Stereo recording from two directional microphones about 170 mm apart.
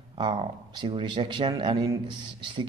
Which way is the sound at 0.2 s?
30° right (ahead or behind).